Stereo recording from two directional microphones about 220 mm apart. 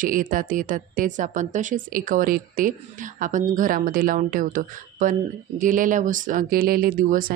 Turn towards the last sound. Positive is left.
turn(degrees=-40)  # may be behind; listen again after turning